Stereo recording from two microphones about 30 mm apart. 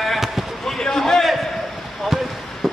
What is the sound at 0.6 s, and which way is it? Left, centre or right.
Basketball bounce, centre.